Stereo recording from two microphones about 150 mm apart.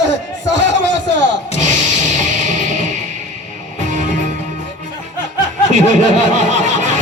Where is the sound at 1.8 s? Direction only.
55° right (ahead or behind).